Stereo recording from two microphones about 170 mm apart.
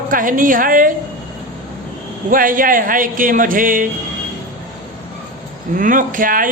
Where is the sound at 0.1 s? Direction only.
55° right (ahead or behind).